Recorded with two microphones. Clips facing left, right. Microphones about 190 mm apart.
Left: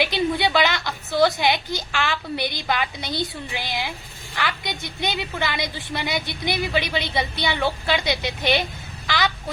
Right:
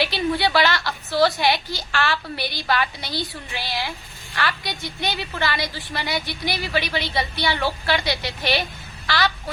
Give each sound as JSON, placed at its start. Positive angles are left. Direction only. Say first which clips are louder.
{"t": 0.0, "sound": "a woman's voice", "louder": "even", "side_deg": 20}